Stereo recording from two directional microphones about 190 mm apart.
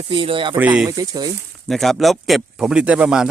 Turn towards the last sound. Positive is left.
turn(degrees=-5)  # may be behind; listen again after turning